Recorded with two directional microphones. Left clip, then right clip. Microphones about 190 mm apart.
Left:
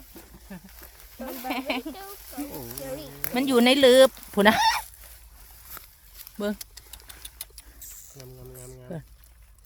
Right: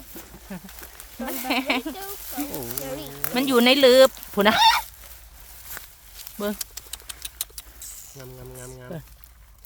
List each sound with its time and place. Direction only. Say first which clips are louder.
0.2 s speech: right 5 dB; 5° right (ahead or behind)
2.8 s speech: right 3 dB; 15° left (ahead or behind)
4.5 s goat: right 5 dB; 15° left (ahead or behind)
5.8 s walk: right 5 dB; 5° right (ahead or behind)
6.1 s a sound: right 2 dB; 25° left (ahead or behind)
6.6 s a sound: right 8 dB; 15° right (ahead or behind)